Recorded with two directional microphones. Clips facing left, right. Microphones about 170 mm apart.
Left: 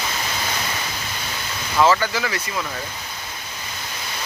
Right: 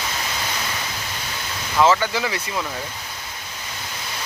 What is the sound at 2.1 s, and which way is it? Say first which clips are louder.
Speech: right 1 dB; 25° right (ahead or behind).